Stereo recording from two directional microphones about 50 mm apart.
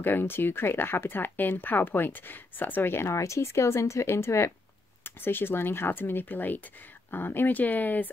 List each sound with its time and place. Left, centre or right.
0.0 s speech: left
3.2 s speech: left
5.0 s speech: left